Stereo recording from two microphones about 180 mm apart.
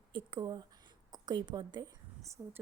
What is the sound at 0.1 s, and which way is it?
A woman's voice, 25° right (ahead or behind).